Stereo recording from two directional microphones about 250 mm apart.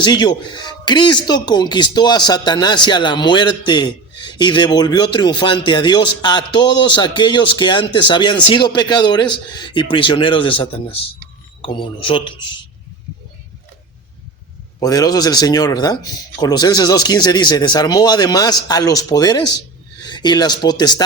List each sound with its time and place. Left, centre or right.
0.0 s speech: centre
14.8 s speech: centre